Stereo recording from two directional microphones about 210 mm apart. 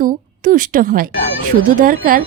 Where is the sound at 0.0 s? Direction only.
40° right (ahead or behind).